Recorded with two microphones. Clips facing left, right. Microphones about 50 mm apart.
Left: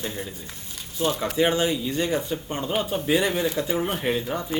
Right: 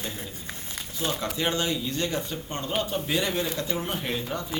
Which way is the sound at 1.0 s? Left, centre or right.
Centre.